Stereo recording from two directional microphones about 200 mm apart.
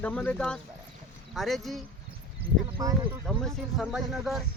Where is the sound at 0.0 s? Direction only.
5° left (ahead or behind).